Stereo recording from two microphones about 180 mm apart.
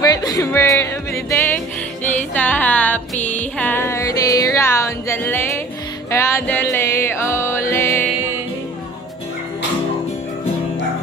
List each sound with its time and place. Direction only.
0.0 s music: 20° left (ahead or behind)